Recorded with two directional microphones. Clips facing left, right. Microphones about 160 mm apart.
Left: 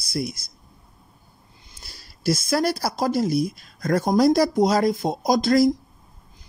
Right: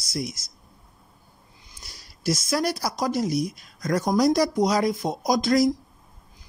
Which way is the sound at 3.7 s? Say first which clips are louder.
Left 3 dB; 55° left (ahead or behind).